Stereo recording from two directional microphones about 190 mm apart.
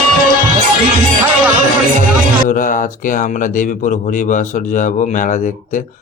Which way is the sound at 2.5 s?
45° left (ahead or behind).